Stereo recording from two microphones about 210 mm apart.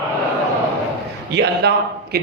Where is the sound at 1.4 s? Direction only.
50° right (ahead or behind).